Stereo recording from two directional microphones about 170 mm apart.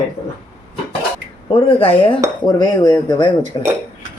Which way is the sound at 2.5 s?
25° left (ahead or behind).